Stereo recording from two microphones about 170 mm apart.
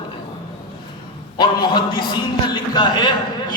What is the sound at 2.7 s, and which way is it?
Speech, 25° left (ahead or behind).